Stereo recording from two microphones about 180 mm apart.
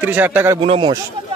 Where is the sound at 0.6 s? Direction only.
30° right (ahead or behind).